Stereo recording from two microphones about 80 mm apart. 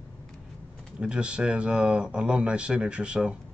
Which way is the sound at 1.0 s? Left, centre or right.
Centre.